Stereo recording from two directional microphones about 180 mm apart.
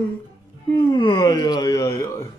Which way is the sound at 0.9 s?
25° left (ahead or behind).